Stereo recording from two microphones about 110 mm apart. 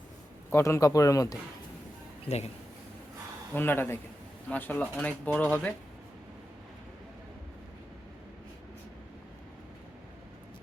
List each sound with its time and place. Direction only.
0.5 s speech: 25° left (ahead or behind)
2.2 s speech: 80° left
3.5 s speech: 20° left (ahead or behind)